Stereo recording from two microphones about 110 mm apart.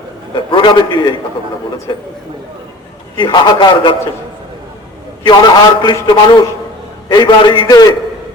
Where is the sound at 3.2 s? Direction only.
45° left (ahead or behind).